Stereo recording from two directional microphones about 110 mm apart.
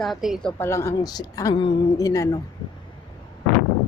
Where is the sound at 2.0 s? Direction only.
35° left (ahead or behind).